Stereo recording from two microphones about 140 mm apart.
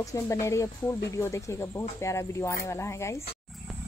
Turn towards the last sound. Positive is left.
turn(degrees=20)  # may be behind; listen again after turning